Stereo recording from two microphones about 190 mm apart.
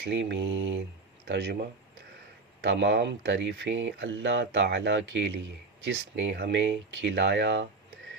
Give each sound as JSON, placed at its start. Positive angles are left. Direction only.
{"t": 0.0, "sound": "speech", "side_deg": -65}